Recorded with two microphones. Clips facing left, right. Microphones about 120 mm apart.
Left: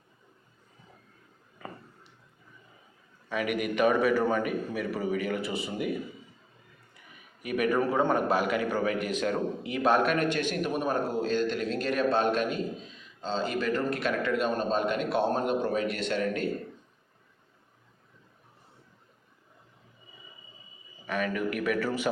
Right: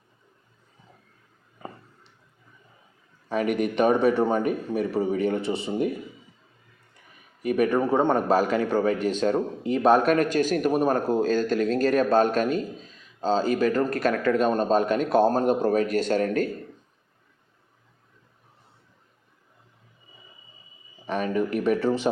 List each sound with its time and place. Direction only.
1.5 s a sound: 30° right (ahead or behind)
3.2 s a man's voice: 35° right (ahead or behind)
7.4 s a man's voice: 35° right (ahead or behind)
21.1 s a man's voice: 30° right (ahead or behind)